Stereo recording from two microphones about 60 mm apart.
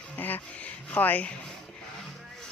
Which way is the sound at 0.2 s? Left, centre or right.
Left.